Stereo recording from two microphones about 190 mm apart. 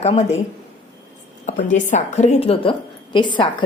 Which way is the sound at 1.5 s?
40° left (ahead or behind).